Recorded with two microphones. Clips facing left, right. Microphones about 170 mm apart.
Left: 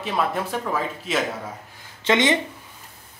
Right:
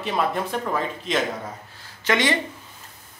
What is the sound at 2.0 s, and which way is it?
Speech, 20° left (ahead or behind).